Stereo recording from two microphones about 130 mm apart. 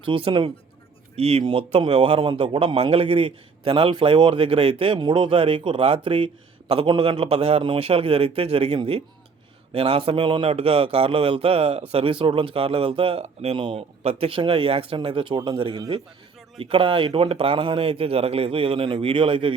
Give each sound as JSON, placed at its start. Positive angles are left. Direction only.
{"t": 0.0, "sound": "a man's voice", "side_deg": -40}